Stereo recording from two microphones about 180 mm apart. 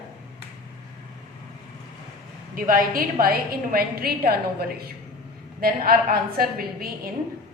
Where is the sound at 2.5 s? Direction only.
50° right (ahead or behind).